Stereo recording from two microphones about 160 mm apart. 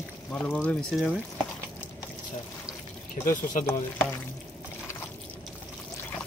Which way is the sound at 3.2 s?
55° left (ahead or behind).